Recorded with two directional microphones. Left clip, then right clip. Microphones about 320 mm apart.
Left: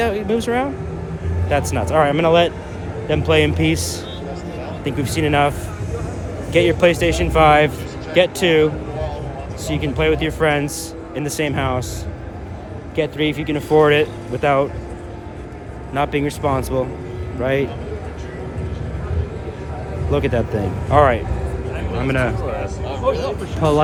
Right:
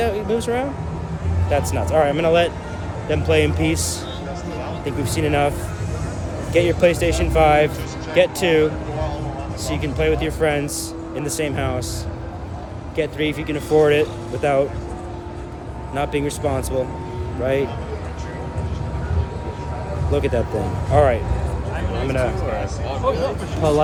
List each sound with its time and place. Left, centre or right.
0.0 s vehicle: left
1.5 s speech: left
13.0 s speech: left
16.0 s speech: left
20.1 s speech: left
22.9 s speech: right